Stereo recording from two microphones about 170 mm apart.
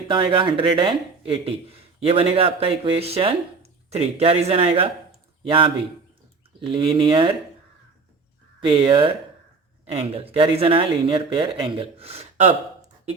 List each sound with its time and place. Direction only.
0.1 s speech: 30° right (ahead or behind)
8.6 s speech: 30° right (ahead or behind)